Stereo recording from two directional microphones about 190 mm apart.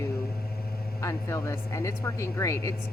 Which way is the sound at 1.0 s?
15° left (ahead or behind).